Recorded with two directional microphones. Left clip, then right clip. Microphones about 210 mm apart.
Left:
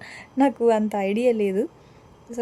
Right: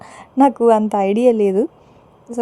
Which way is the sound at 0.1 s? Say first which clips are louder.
Right 7 dB; 15° right (ahead or behind).